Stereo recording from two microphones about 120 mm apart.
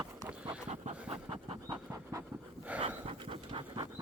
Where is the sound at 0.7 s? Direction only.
75° right (ahead or behind).